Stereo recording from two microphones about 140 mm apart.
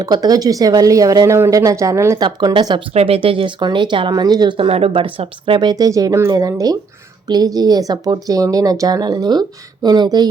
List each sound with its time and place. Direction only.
0.0 s speech: 25° right (ahead or behind)
2.2 s speech: 35° right (ahead or behind)
2.9 s speech: 45° right (ahead or behind); by 10.2 s 30° right (ahead or behind)